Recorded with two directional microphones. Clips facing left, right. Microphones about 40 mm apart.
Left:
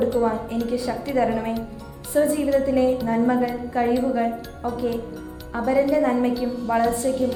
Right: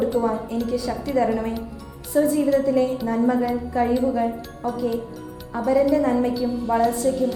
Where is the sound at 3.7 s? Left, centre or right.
Left.